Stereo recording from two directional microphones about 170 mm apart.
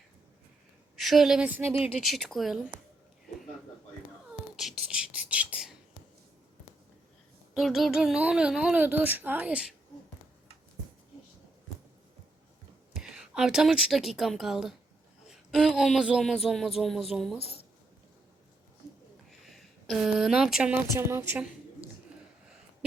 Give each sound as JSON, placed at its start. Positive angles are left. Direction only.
{"t": 0.9, "sound": "a woman's voice", "side_deg": 0}
{"t": 2.0, "sound": "speech", "side_deg": 0}
{"t": 4.5, "sound": "whispering", "side_deg": -5}
{"t": 7.5, "sound": "speech", "side_deg": 0}
{"t": 13.0, "sound": "speech", "side_deg": -5}
{"t": 17.3, "sound": "a woman's voice", "side_deg": 35}
{"t": 19.3, "sound": "speech", "side_deg": 0}